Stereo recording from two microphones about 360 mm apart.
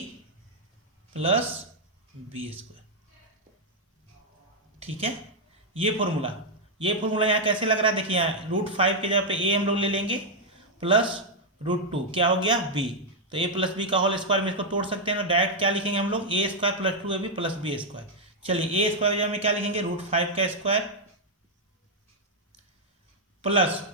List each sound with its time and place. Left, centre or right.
1.1 s a man's voice: centre
4.8 s a man's voice: centre
23.4 s a man's voice: centre